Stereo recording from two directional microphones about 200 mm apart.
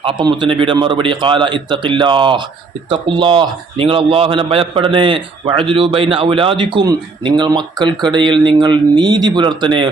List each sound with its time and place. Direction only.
0.0 s a man's voice: 25° right (ahead or behind)